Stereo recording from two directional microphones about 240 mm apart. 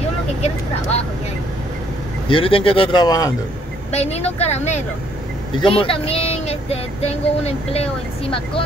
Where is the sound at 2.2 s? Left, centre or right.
Left.